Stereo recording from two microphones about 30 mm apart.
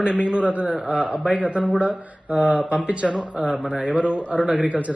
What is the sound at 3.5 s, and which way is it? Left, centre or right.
Speech, right.